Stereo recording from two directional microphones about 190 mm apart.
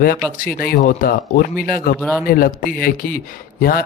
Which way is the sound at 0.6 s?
50° left (ahead or behind).